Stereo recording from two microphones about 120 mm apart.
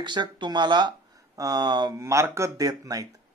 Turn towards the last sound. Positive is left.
turn(degrees=-30)  # may be behind; listen again after turning